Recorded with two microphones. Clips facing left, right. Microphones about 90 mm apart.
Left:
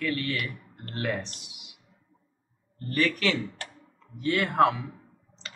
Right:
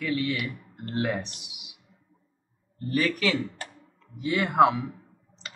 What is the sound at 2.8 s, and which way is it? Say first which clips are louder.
Speech: right 1 dB; 10° right (ahead or behind).